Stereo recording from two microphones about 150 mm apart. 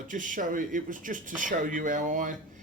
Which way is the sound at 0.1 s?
60° right (ahead or behind).